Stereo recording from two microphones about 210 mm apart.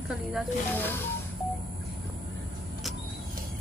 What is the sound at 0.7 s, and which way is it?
Music, 10° left (ahead or behind).